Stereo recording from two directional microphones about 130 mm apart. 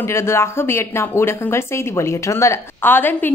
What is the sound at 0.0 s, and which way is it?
Speech, 20° left (ahead or behind).